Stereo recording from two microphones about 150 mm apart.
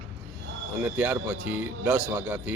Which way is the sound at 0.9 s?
15° right (ahead or behind).